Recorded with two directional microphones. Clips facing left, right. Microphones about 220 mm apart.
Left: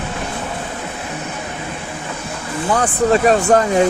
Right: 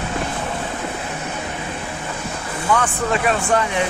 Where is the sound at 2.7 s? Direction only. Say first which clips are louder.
Left 8 dB; 35° left (ahead or behind).